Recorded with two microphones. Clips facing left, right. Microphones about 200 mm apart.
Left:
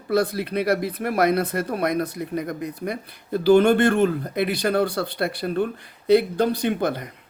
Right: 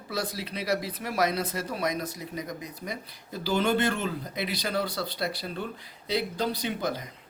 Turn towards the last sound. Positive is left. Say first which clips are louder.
# left 7 dB
turn(degrees=60)  # may be behind; listen again after turning